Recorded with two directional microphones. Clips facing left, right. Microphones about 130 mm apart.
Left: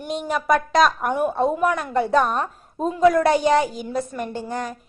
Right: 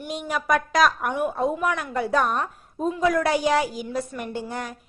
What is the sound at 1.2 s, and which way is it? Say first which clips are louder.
A woman's voice: left 4 dB; 30° left (ahead or behind).